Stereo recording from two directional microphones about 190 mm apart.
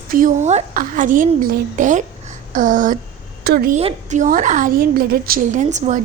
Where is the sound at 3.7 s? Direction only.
40° right (ahead or behind).